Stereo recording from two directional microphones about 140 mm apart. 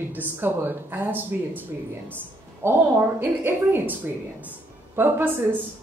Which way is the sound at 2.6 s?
15° right (ahead or behind).